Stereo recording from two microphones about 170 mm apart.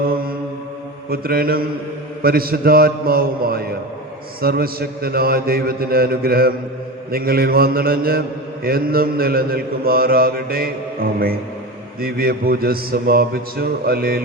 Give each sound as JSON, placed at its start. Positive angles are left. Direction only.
{"t": 0.0, "sound": "mantra", "side_deg": -60}